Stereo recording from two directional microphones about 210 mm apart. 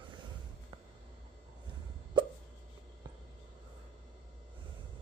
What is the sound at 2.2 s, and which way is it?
Hiccup, 20° right (ahead or behind).